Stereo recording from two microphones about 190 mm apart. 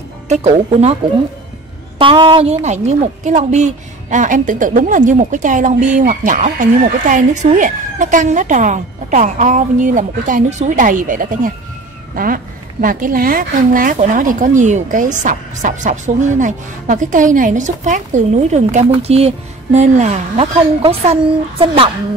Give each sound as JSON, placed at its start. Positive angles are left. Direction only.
{"t": 0.3, "sound": "a woman's voice", "side_deg": -35}
{"t": 2.0, "sound": "a woman's voice", "side_deg": -25}